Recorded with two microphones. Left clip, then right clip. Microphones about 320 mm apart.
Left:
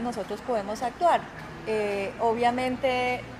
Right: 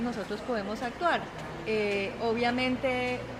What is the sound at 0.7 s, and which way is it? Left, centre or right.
Speech, left.